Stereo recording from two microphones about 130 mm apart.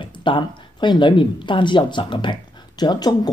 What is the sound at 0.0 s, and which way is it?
Speech, 40° left (ahead or behind).